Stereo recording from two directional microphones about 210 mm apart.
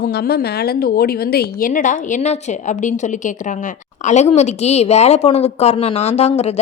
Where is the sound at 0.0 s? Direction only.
50° left (ahead or behind).